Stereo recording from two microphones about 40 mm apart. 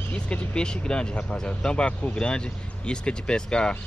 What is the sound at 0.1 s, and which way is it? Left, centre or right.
Vehicle, left.